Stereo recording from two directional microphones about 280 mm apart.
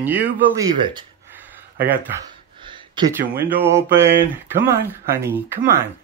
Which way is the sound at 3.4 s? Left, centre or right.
Centre.